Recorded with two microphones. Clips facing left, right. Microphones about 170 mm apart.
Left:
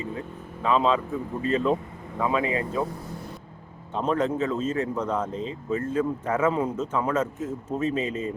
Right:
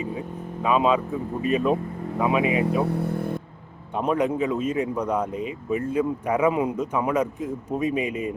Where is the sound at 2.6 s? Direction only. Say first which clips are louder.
Right 6 dB; 75° right (ahead or behind); by 3.4 s 60° right (ahead or behind).